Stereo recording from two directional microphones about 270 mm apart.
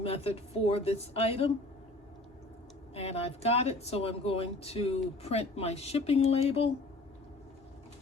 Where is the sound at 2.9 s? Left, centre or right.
Left.